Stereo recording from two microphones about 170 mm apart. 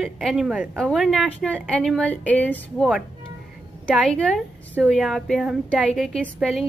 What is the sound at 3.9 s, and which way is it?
A woman's voice, 5° left (ahead or behind).